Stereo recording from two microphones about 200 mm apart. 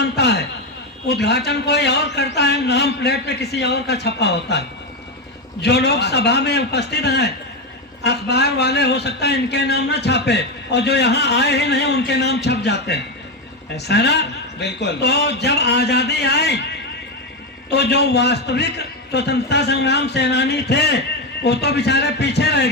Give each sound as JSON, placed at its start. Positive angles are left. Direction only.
{"t": 0.0, "sound": "a man's voice", "side_deg": 55}
{"t": 5.6, "sound": "a man's voice", "side_deg": 55}
{"t": 17.7, "sound": "a man's voice", "side_deg": 55}